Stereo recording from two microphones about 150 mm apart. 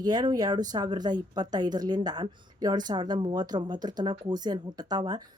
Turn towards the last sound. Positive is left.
turn(degrees=-25)  # may be behind; listen again after turning